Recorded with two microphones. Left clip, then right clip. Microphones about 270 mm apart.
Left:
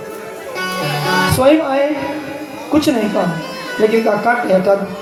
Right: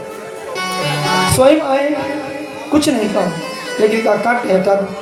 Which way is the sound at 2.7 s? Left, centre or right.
Right.